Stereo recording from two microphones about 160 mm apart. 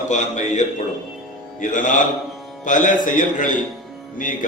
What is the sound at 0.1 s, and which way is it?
Speech, 50° left (ahead or behind).